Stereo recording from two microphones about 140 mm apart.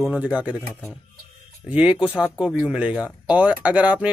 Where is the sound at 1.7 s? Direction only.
10° right (ahead or behind).